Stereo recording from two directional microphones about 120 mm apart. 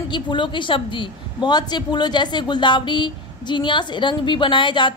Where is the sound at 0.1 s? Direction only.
40° left (ahead or behind).